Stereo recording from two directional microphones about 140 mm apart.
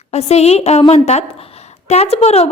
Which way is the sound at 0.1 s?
50° left (ahead or behind).